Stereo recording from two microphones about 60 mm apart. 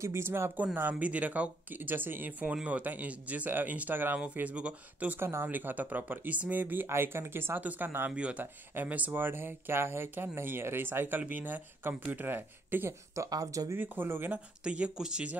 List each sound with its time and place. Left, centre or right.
0.0 s speech: right
0.7 s speech: right
2.4 s speech: right
5.2 s speech: right
5.5 s speech: right
6.9 s speech: right
8.2 s speech: centre; by 12.9 s right
13.1 s speech: right
13.7 s speech: right
14.6 s speech: centre